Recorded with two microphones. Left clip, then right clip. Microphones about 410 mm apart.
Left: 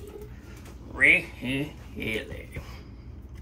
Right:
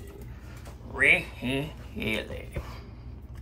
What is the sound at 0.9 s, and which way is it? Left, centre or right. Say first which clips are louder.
Speech: left 2 dB; right.